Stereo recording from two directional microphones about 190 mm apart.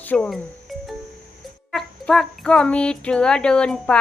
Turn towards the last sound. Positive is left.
turn(degrees=5)  # may be behind; listen again after turning